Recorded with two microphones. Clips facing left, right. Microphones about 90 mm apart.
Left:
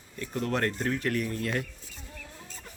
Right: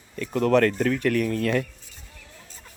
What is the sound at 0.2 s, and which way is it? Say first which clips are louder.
Speech: right 10 dB; 90° right.